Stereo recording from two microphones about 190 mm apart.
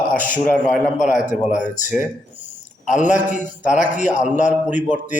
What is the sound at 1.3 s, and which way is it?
Speech, 40° left (ahead or behind).